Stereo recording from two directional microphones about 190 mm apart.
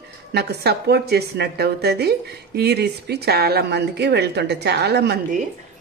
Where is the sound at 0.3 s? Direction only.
60° right (ahead or behind).